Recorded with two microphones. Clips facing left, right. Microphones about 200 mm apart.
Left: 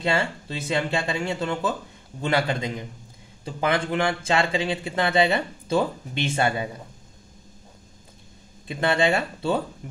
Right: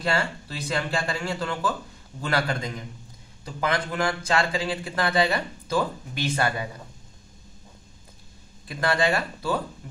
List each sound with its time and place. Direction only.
0.0 s speech: 25° left (ahead or behind)
8.6 s speech: 25° left (ahead or behind)